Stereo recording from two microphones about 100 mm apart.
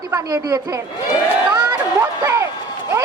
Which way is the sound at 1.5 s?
30° right (ahead or behind).